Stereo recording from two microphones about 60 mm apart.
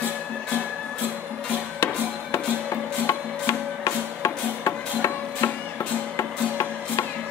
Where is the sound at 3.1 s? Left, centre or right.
Left.